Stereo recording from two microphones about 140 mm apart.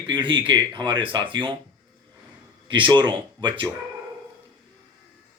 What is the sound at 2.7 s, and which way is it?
Speech, 35° right (ahead or behind).